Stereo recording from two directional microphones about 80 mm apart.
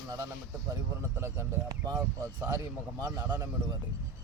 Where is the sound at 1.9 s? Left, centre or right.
Right.